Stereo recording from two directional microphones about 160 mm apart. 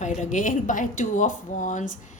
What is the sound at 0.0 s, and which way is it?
A woman's voice, 50° left (ahead or behind).